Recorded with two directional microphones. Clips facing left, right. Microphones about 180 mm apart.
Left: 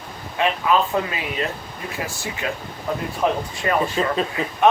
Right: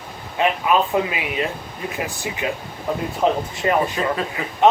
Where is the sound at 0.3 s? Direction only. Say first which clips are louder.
Right 1 dB; 20° right (ahead or behind).